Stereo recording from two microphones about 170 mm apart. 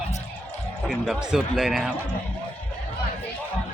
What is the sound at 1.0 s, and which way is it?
Speech, 5° right (ahead or behind).